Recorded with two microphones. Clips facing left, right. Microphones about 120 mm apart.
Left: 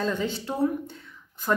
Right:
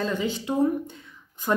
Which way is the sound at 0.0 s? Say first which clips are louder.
Right 1 dB; 5° right (ahead or behind).